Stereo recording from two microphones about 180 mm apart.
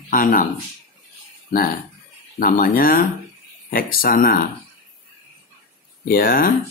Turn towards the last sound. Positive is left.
turn(degrees=55)  # may be behind; listen again after turning